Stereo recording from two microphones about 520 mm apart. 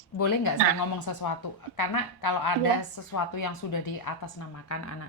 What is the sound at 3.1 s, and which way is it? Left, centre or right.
Speech, left.